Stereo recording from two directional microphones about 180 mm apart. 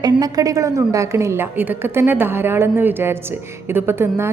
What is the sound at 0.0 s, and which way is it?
A woman's voice, 20° right (ahead or behind).